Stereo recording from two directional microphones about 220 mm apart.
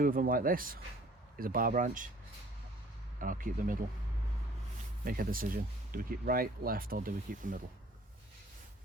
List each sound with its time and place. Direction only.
0.0 s speech: 40° right (ahead or behind)
3.2 s speech: 40° right (ahead or behind)
5.0 s speech: 40° right (ahead or behind)